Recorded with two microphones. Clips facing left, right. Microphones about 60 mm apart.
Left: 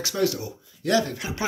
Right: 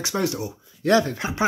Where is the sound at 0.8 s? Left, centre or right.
Right.